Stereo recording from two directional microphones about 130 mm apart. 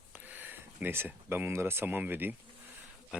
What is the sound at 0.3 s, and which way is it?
Speech, 15° right (ahead or behind).